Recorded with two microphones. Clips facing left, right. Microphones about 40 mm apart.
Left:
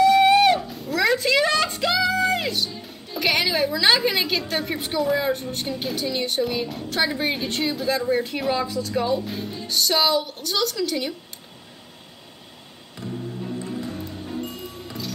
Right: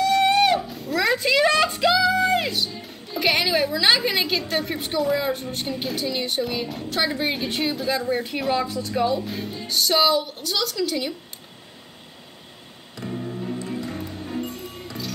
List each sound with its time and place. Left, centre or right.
0.0 s a sound: centre
2.0 s speech: centre
13.1 s music: right
14.4 s music: centre